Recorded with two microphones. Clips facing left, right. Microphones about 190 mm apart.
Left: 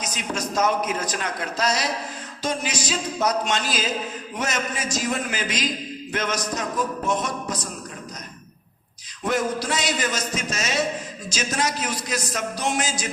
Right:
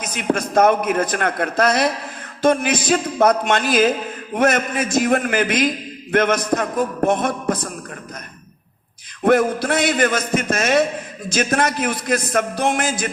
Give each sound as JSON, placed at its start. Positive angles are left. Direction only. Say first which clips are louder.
{"t": 0.0, "sound": "a man's voice", "louder": "right 7 dB", "side_deg": -55}
{"t": 9.2, "sound": "a man's voice", "louder": "right 8 dB", "side_deg": -55}